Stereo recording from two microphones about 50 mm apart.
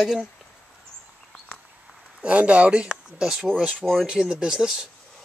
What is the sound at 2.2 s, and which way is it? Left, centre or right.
Speech, right.